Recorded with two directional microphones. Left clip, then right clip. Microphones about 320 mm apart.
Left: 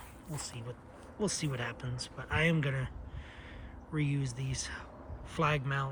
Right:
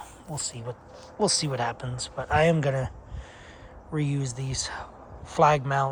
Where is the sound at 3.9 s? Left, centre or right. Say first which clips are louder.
Right 6 dB; centre.